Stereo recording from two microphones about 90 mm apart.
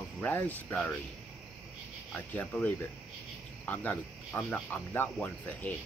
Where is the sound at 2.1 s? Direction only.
15° left (ahead or behind).